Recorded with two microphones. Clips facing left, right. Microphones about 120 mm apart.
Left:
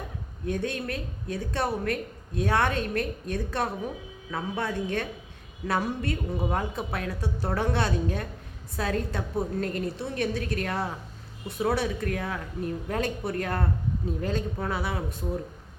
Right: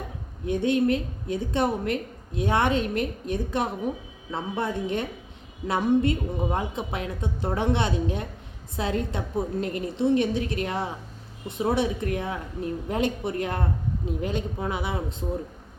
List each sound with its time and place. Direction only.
0.4 s a woman's voice: 20° right (ahead or behind)